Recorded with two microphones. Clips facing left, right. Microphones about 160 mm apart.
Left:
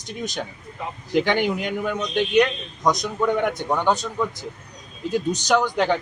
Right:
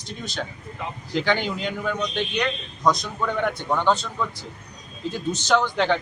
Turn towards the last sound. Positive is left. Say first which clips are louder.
# left 1 dB
turn(degrees=10)  # may be behind; listen again after turning